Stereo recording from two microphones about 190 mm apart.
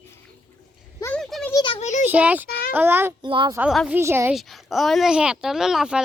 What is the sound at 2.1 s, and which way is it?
A child's voice, 10° right (ahead or behind).